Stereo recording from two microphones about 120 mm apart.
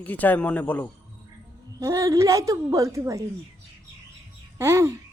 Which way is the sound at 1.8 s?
25° right (ahead or behind).